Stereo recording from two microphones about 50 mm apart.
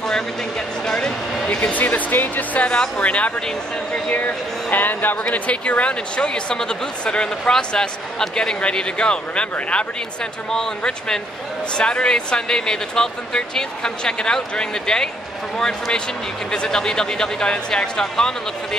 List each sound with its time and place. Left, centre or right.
0.8 s speech: centre
1.7 s speech: left
5.3 s speech: left
16.5 s speech: centre